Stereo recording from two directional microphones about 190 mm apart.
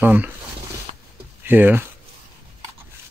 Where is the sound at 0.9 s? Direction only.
35° right (ahead or behind).